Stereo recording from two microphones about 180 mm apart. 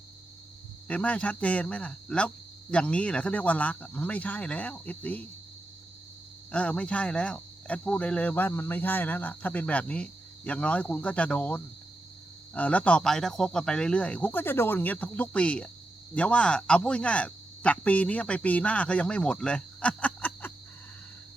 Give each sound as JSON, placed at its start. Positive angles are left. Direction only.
{"t": 0.9, "sound": "speech", "side_deg": 5}
{"t": 6.5, "sound": "speech", "side_deg": 5}